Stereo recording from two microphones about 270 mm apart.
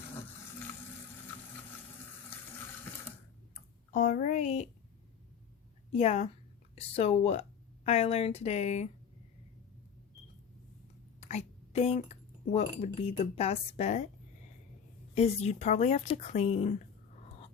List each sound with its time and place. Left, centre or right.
3.9 s speech: left
5.9 s speech: left
11.2 s speech: left
15.1 s speech: left